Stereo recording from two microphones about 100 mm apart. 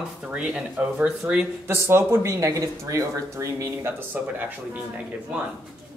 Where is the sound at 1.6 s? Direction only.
25° right (ahead or behind).